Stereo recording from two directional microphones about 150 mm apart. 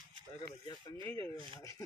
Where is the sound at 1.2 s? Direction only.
35° right (ahead or behind).